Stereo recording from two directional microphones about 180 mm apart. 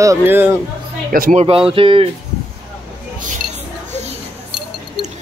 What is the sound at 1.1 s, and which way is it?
Speech, 50° right (ahead or behind).